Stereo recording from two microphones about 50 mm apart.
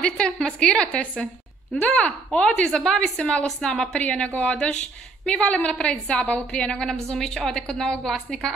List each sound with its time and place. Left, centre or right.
0.0 s a woman's voice: centre